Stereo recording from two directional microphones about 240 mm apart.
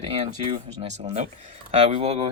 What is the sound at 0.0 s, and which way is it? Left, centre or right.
Speech, right.